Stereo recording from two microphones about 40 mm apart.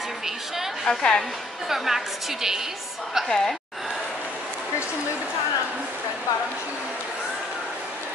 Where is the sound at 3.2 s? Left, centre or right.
Centre.